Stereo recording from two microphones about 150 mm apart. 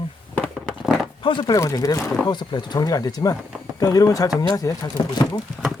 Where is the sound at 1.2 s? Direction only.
30° left (ahead or behind).